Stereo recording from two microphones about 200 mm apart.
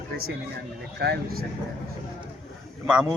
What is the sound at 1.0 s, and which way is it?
Speech, 50° right (ahead or behind).